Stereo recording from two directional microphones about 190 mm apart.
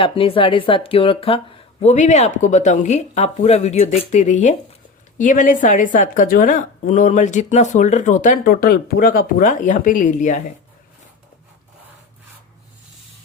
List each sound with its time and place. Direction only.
0.0 s a woman's voice: 30° left (ahead or behind)